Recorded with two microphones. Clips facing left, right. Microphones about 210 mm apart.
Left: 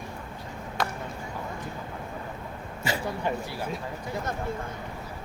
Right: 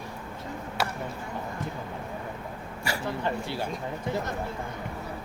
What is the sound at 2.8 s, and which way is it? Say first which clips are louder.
Speech: left 1 dB; 20° left (ahead or behind).